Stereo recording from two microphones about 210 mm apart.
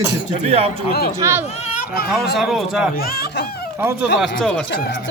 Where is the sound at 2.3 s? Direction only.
Centre (ahead or behind).